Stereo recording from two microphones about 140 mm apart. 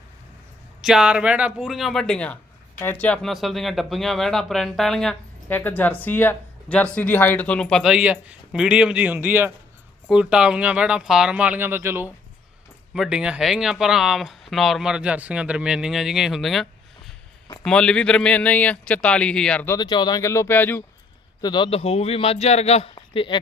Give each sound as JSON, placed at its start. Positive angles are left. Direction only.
{"t": 0.8, "sound": "speech", "side_deg": -5}
{"t": 5.5, "sound": "speech", "side_deg": 15}
{"t": 12.9, "sound": "speech", "side_deg": -5}
{"t": 19.8, "sound": "speech", "side_deg": 30}
{"t": 21.4, "sound": "a man's voice", "side_deg": 35}
{"t": 23.0, "sound": "a sound", "side_deg": 35}